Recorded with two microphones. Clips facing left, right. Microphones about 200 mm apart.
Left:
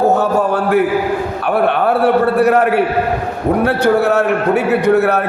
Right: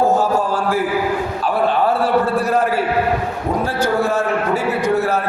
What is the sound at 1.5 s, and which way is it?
A man's voice, 65° left (ahead or behind).